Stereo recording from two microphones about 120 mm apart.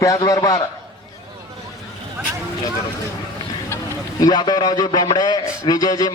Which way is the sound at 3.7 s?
20° left (ahead or behind).